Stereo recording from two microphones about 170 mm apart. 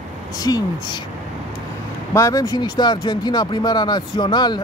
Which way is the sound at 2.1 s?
20° left (ahead or behind).